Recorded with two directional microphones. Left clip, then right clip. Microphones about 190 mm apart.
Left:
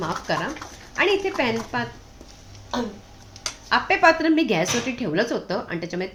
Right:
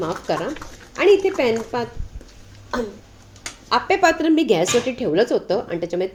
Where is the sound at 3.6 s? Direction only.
20° right (ahead or behind).